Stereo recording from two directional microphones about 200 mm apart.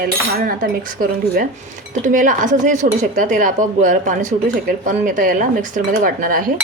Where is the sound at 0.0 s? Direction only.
45° right (ahead or behind).